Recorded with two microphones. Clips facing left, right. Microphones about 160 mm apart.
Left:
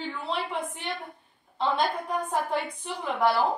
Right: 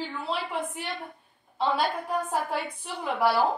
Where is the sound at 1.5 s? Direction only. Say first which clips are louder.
Even; 5° right (ahead or behind).